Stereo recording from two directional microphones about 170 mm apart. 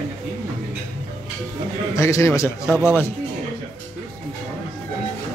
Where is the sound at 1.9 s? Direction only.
15° left (ahead or behind).